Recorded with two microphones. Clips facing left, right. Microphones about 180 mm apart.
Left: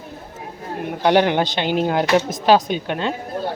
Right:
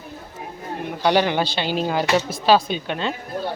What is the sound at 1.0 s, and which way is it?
Speech, 15° left (ahead or behind).